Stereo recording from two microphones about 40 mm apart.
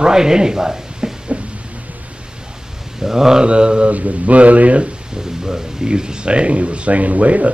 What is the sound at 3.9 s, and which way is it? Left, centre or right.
Speech, right.